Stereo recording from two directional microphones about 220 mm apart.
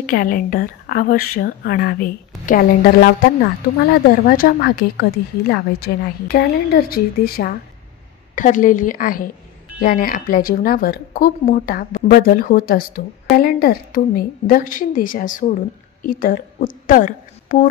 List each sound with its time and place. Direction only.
0.0 s a woman's voice: 40° left (ahead or behind)